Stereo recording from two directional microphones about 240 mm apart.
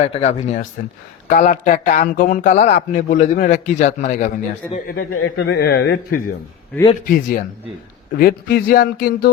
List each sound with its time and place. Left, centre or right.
0.0 s a man's voice: left
5.1 s a man's voice: left